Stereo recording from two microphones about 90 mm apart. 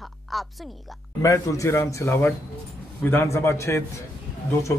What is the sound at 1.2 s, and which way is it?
A man's voice, 35° left (ahead or behind).